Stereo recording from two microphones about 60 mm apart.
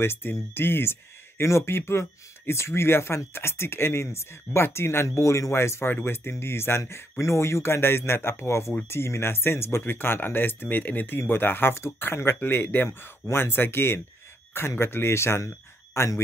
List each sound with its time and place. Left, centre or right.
0.0 s speech: left
1.4 s a man's voice: left